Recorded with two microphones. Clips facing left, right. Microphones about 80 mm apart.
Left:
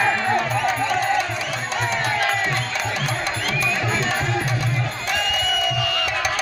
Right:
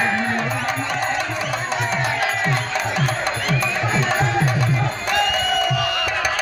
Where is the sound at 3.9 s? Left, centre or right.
Centre.